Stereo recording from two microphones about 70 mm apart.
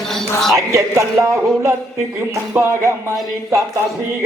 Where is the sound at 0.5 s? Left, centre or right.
Right.